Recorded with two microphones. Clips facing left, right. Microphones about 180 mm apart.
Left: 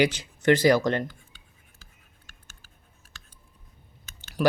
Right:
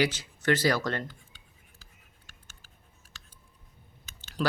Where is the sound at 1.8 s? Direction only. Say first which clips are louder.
Left 1 dB; 55° left (ahead or behind).